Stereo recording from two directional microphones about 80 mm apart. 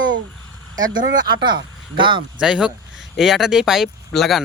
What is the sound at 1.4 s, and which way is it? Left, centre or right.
Speech, right.